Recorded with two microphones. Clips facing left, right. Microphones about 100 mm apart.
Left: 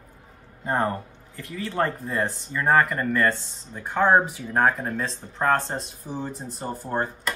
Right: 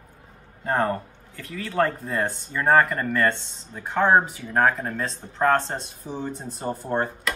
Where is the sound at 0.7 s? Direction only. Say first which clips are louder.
Right 1 dB; 20° left (ahead or behind).